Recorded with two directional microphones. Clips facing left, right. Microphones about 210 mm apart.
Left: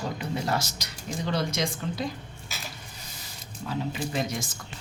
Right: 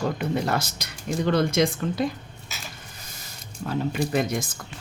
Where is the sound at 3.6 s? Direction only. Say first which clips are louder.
Right 5 dB; 55° right (ahead or behind).